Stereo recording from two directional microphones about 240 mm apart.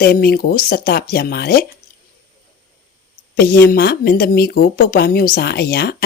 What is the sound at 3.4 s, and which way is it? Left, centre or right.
Speech, left.